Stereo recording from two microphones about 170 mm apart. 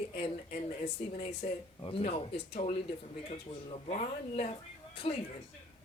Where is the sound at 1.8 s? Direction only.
30° left (ahead or behind).